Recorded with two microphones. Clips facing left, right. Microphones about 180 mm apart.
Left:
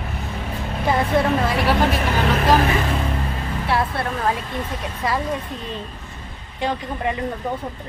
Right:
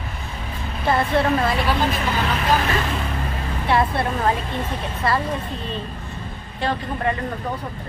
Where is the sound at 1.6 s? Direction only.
75° left (ahead or behind).